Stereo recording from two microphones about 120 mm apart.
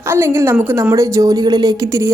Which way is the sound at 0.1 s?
20° right (ahead or behind).